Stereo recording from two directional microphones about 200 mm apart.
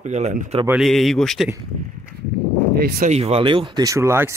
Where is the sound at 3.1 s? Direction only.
30° right (ahead or behind); by 4.4 s 15° right (ahead or behind).